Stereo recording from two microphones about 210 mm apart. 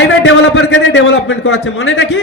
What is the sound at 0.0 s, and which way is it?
A man's voice, 65° left (ahead or behind).